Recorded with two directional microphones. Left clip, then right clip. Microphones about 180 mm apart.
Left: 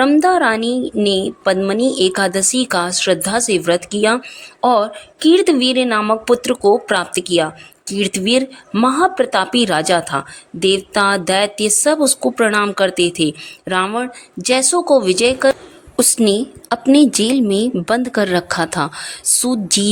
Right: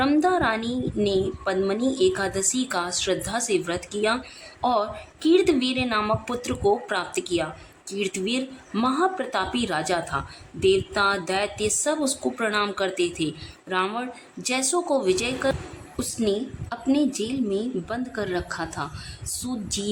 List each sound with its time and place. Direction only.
0.0 s speech: 45° left (ahead or behind)